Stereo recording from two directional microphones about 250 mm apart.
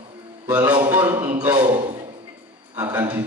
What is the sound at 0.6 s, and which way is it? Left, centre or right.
Speech, centre.